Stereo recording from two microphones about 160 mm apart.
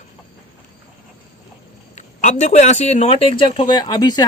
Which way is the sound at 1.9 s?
45° left (ahead or behind).